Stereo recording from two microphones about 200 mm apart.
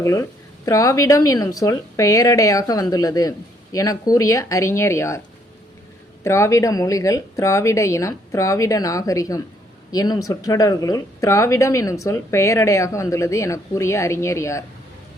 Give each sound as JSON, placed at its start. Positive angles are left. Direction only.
{"t": 0.0, "sound": "speech", "side_deg": 15}
{"t": 6.2, "sound": "speech", "side_deg": 15}